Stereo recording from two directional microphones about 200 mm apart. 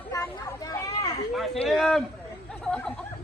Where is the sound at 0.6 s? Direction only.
20° left (ahead or behind).